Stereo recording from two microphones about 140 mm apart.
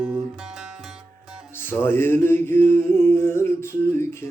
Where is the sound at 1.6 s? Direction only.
15° left (ahead or behind).